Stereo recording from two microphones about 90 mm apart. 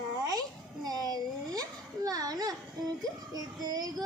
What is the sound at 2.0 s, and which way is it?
Child singing, 45° right (ahead or behind).